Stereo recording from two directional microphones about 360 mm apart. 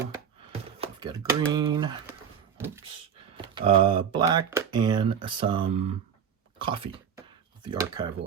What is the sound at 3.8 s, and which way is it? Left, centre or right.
Speech, centre.